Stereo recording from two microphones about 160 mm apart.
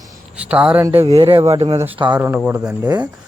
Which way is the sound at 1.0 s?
35° right (ahead or behind).